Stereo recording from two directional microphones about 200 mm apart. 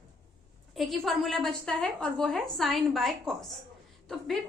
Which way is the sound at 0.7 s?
Centre (ahead or behind).